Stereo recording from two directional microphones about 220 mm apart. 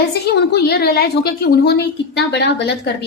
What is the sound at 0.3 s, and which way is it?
A woman's voice, 50° left (ahead or behind).